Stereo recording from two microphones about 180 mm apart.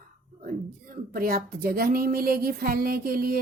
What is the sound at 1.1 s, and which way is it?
A woman's voice, 55° right (ahead or behind).